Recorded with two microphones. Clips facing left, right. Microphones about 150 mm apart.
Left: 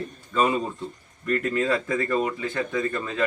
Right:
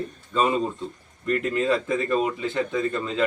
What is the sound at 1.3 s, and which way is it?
Speech, 20° right (ahead or behind).